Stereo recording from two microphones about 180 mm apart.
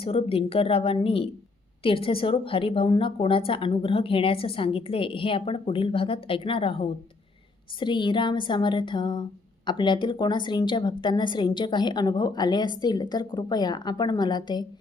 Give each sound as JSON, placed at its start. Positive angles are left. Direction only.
{"t": 0.0, "sound": "a woman's voice", "side_deg": 30}